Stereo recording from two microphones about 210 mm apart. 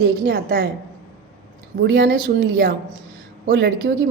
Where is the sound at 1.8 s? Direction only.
50° right (ahead or behind).